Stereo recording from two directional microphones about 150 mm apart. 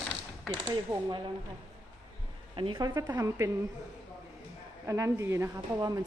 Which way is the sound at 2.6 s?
30° right (ahead or behind).